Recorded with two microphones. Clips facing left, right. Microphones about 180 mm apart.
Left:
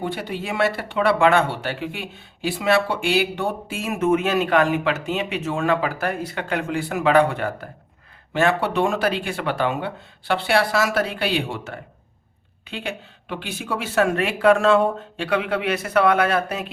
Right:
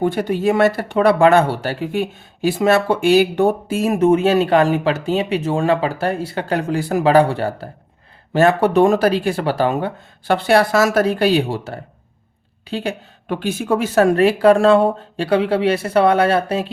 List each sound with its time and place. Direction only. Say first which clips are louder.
0.0 s speech: right 10 dB; 45° right (ahead or behind)